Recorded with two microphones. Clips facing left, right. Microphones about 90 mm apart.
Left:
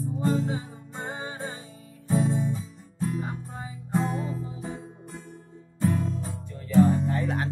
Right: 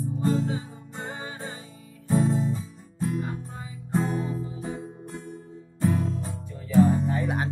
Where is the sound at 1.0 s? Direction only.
30° left (ahead or behind).